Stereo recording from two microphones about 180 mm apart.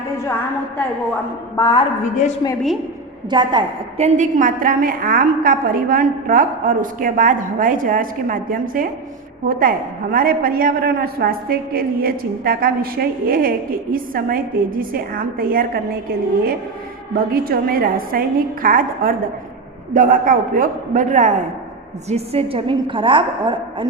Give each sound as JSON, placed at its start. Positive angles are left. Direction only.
{"t": 1.5, "sound": "a woman's voice", "side_deg": 20}
{"t": 2.1, "sound": "a woman's voice", "side_deg": 40}
{"t": 3.2, "sound": "a woman's voice", "side_deg": -25}
{"t": 17.3, "sound": "a woman's voice", "side_deg": -55}
{"t": 22.1, "sound": "a woman's voice", "side_deg": -35}